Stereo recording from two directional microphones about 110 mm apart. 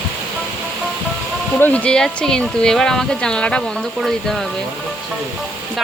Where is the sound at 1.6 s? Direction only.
10° left (ahead or behind).